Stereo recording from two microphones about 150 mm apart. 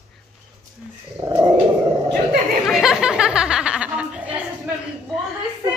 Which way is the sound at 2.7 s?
5° right (ahead or behind).